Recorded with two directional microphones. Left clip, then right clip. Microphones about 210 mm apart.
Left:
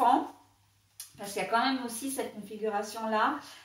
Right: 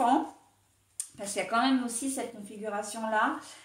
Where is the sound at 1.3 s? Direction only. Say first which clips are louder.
Even; 45° right (ahead or behind).